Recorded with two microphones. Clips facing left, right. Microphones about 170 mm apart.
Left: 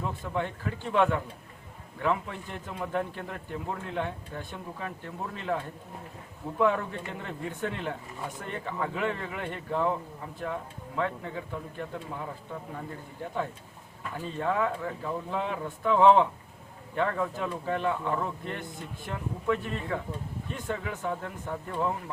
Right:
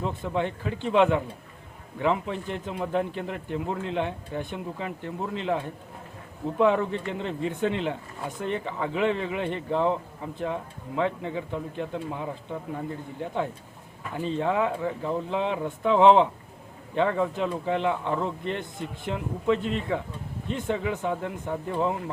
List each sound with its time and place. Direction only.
0.0 s a man's voice: 20° right (ahead or behind)
14.2 s a man's voice: 20° right (ahead or behind)